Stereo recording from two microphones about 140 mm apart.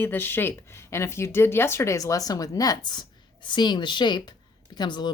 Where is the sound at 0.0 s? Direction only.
15° left (ahead or behind).